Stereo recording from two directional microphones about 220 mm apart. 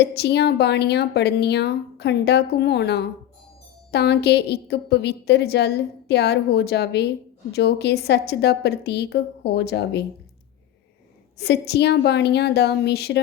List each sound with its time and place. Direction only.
0.0 s a woman's voice: 50° left (ahead or behind)
11.3 s a woman's voice: 45° left (ahead or behind)